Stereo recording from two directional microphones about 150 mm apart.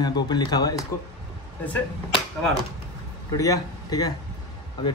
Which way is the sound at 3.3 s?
20° left (ahead or behind).